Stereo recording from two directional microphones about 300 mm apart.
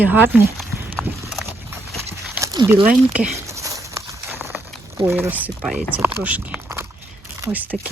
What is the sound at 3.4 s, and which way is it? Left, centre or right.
Crumpling, centre.